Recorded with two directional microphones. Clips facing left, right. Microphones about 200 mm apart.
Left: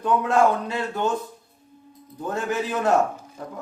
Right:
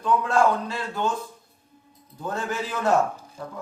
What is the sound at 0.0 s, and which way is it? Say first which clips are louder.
Speech: left 1 dB; 20° left (ahead or behind).